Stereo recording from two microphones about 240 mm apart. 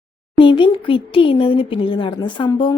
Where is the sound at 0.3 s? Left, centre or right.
Left.